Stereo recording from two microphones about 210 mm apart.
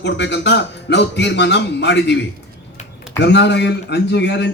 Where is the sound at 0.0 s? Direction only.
55° left (ahead or behind).